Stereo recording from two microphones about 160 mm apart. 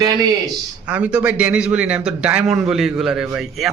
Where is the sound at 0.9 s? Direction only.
10° right (ahead or behind).